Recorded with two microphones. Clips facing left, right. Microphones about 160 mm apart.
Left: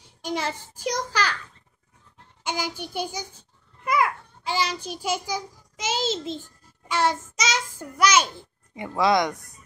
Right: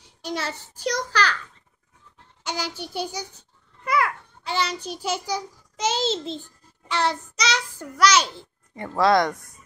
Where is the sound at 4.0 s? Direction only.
10° left (ahead or behind).